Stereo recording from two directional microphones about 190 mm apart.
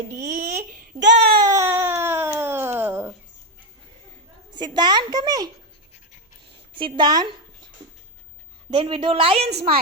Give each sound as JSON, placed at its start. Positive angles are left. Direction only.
{"t": 0.2, "sound": "speech", "side_deg": -40}
{"t": 1.1, "sound": "baby cry", "side_deg": -30}
{"t": 4.5, "sound": "a woman's voice", "side_deg": -20}
{"t": 6.7, "sound": "a woman's voice", "side_deg": -25}
{"t": 8.7, "sound": "a woman's voice", "side_deg": -25}
{"t": 9.5, "sound": "a woman's voice", "side_deg": -55}